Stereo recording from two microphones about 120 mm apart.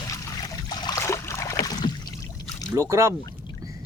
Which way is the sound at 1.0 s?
25° left (ahead or behind).